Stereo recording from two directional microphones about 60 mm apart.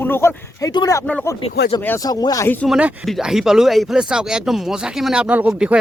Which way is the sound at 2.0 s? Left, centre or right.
Left.